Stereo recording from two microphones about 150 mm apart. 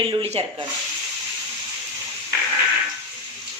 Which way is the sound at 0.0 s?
40° right (ahead or behind).